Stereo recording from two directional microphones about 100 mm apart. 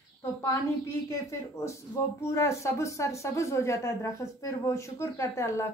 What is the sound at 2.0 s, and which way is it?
Speech, 30° left (ahead or behind).